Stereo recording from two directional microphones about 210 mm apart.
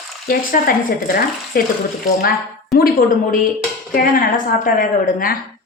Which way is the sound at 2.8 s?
45° left (ahead or behind).